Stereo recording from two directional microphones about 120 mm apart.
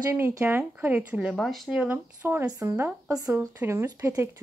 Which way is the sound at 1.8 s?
15° right (ahead or behind).